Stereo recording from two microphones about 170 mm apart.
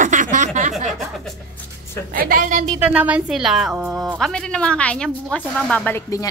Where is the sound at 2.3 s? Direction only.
50° right (ahead or behind).